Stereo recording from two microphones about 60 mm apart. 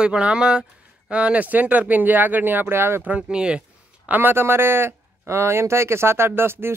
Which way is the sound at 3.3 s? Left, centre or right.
Centre.